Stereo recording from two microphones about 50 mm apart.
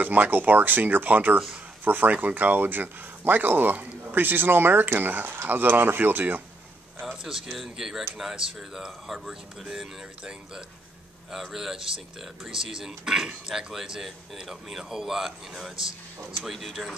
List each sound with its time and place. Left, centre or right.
0.0 s speech: right
7.0 s a sound: centre
7.4 s speech: centre
11.3 s speech: centre